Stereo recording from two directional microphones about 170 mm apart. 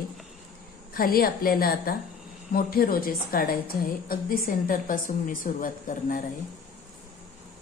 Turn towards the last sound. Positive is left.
turn(degrees=55)  # may be behind; listen again after turning